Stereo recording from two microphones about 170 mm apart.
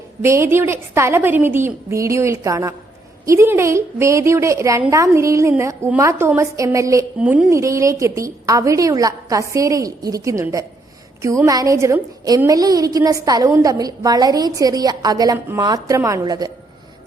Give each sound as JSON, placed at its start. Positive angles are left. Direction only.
{"t": 0.2, "sound": "a woman's voice", "side_deg": -15}
{"t": 7.2, "sound": "a woman's voice", "side_deg": -5}
{"t": 7.5, "sound": "a woman's voice", "side_deg": -15}